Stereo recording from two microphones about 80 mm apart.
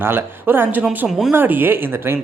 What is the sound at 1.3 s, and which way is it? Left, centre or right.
Speech, right.